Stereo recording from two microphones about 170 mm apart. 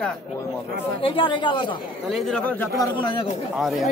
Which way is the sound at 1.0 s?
30° left (ahead or behind).